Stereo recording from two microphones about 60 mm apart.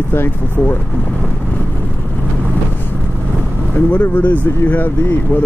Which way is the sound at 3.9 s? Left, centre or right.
Left.